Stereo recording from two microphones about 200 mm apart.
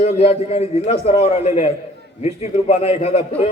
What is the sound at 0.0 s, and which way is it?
A man's voice, 30° left (ahead or behind).